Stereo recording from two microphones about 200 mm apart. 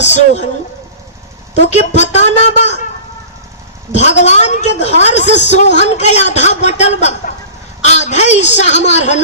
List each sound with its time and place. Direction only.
0.0 s speech: 35° left (ahead or behind)
1.6 s a woman's voice: 35° left (ahead or behind)
4.2 s a woman's voice: 35° left (ahead or behind)